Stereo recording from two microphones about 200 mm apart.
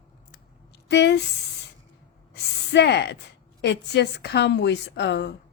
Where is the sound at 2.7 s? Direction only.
60° left (ahead or behind).